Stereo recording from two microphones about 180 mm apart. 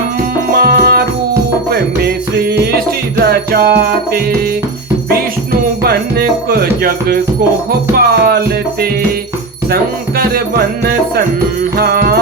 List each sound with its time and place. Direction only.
0.5 s music: 60° right (ahead or behind)
5.8 s music: 60° right (ahead or behind)